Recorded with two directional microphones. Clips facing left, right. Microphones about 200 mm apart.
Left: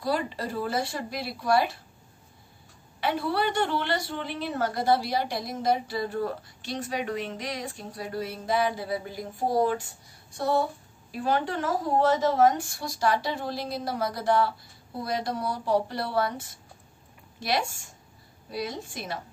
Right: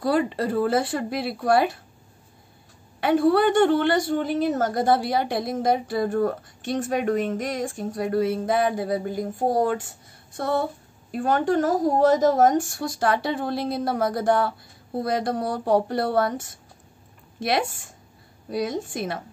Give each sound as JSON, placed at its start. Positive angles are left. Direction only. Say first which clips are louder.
{"t": 0.0, "sound": "a woman's voice", "louder": "right 6 dB", "side_deg": -55}
{"t": 3.0, "sound": "a woman's voice", "louder": "right 9 dB", "side_deg": -50}